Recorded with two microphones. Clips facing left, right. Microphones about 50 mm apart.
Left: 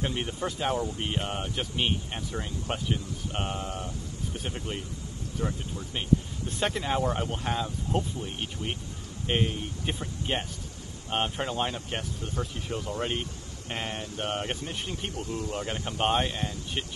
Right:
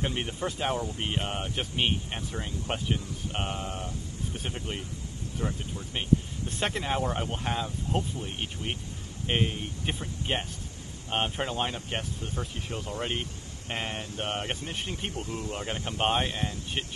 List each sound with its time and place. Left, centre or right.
0.0 s speech: centre
3.6 s speech: right
4.5 s speech: centre
16.0 s speech: centre